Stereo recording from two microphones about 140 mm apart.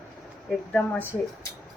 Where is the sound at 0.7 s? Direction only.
15° left (ahead or behind).